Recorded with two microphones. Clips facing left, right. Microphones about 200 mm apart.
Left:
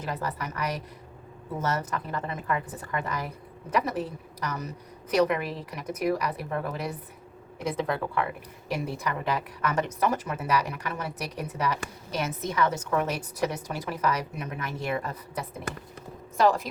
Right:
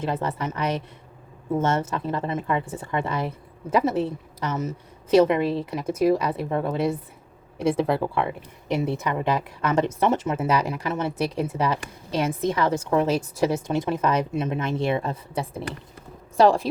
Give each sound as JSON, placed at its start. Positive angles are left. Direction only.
{"t": 0.0, "sound": "a woman's voice", "side_deg": -25}